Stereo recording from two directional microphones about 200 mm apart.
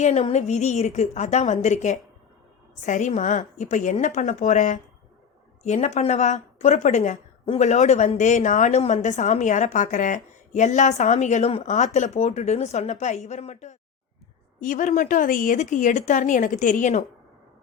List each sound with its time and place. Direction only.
0.0 s a woman's voice: 35° left (ahead or behind)